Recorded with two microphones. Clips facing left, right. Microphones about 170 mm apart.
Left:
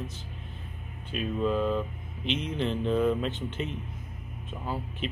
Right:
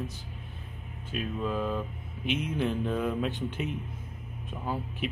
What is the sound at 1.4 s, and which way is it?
Speech, 10° right (ahead or behind).